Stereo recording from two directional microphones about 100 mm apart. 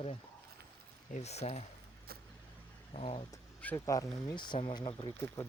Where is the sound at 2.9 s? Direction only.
85° left.